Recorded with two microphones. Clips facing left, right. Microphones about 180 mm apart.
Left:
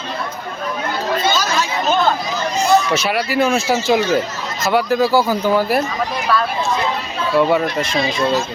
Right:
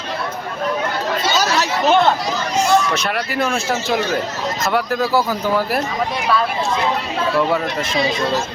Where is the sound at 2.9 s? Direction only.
5° left (ahead or behind).